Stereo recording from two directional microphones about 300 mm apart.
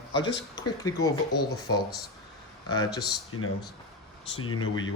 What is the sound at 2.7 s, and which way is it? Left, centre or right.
Speech, centre.